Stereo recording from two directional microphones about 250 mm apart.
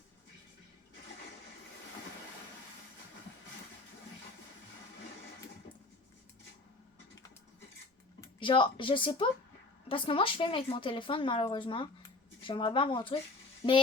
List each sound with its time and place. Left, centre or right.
8.2 s a woman's voice: centre
13.6 s frying: centre